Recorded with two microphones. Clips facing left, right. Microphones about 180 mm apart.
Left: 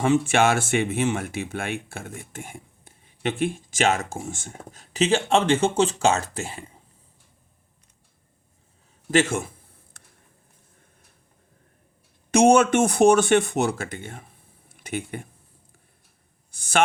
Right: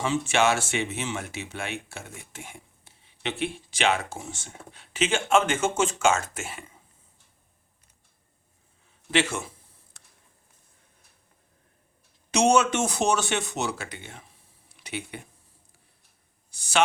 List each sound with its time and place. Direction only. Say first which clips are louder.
0.0 s speech: left 4 dB; 55° left (ahead or behind); by 6.7 s 35° left (ahead or behind)
9.0 s speech: left 5 dB; 45° left (ahead or behind)
10.0 s a sound: left 4 dB; 55° left (ahead or behind)
12.3 s speech: left 5 dB; 55° left (ahead or behind)
14.7 s a sound: left 5 dB; 50° left (ahead or behind)
16.5 s speech: left 2 dB; 50° left (ahead or behind)